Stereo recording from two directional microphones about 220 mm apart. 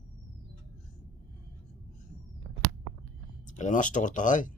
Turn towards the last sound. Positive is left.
turn(degrees=35)  # may be behind; listen again after turning